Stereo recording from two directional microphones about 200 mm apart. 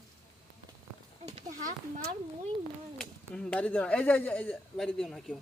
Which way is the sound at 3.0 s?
5° left (ahead or behind).